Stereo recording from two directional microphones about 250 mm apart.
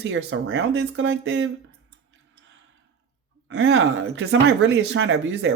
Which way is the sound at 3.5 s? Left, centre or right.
Right.